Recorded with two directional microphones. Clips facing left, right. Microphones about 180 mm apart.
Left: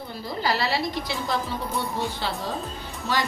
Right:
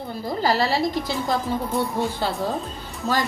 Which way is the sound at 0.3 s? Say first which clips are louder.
Right 4 dB; 45° right (ahead or behind).